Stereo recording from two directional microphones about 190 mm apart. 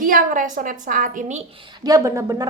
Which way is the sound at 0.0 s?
45° right (ahead or behind).